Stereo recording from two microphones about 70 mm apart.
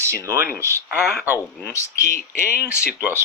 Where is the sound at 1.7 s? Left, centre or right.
Left.